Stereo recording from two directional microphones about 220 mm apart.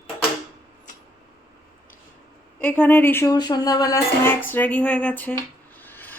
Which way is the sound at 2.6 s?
5° left (ahead or behind).